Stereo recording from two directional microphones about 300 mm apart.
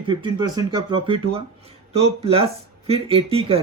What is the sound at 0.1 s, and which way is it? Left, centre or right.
Speech, centre.